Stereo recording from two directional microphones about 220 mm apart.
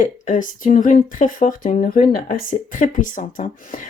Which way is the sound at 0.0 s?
35° left (ahead or behind).